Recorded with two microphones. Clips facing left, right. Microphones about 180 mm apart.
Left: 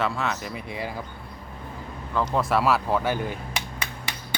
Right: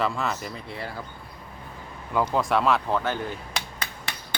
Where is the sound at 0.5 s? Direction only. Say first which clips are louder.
Left 3 dB; 15° left (ahead or behind).